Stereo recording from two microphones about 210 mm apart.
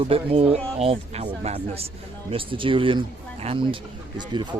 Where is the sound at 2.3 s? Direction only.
25° right (ahead or behind).